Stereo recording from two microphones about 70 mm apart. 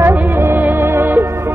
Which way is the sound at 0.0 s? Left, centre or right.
Right.